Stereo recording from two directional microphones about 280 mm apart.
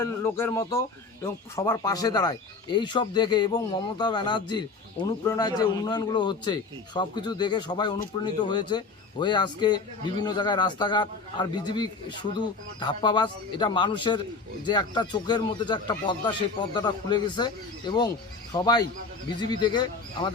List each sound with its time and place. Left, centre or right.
0.0 s speech: centre